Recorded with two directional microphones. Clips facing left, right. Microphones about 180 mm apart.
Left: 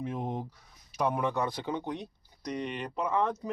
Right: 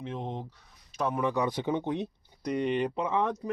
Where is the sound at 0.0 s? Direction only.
10° left (ahead or behind).